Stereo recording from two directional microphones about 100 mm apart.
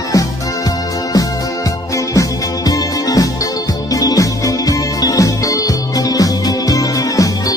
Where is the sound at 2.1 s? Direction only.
35° left (ahead or behind).